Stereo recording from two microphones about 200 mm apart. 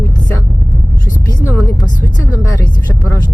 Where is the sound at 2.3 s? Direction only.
15° left (ahead or behind).